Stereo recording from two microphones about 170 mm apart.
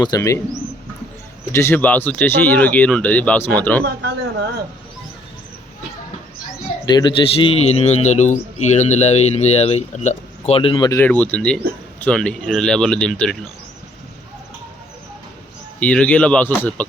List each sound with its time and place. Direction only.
0.0 s speech: 20° left (ahead or behind)
1.5 s speech: 10° left (ahead or behind)
6.8 s a man's voice: 25° left (ahead or behind); by 13.3 s 5° left (ahead or behind)
15.8 s speech: 5° left (ahead or behind)